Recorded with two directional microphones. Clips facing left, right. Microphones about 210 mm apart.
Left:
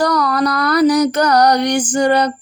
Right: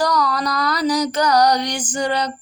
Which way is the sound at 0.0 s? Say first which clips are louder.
Left 4 dB; 60° left (ahead or behind).